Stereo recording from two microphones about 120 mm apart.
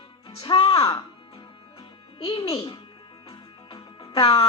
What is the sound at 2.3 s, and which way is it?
Speech, 35° left (ahead or behind).